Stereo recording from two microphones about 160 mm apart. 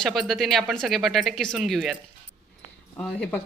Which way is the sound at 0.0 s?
Centre (ahead or behind).